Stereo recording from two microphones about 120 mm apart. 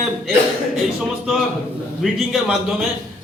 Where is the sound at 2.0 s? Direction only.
Centre (ahead or behind).